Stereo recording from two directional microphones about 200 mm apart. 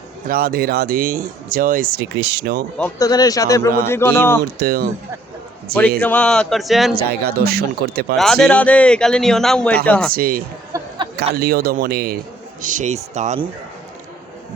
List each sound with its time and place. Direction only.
0.3 s speech: 45° right (ahead or behind)
3.0 s a man's voice: 20° left (ahead or behind)
4.6 s speech: 50° right (ahead or behind)
6.0 s speech: 5° left (ahead or behind)
6.9 s speech: 50° right (ahead or behind)
8.2 s speech: centre (ahead or behind)
10.1 s speech: 45° right (ahead or behind)
10.7 s a sound: 20° right (ahead or behind)
11.3 s speech: 50° right (ahead or behind)
12.6 s speech: 40° right (ahead or behind)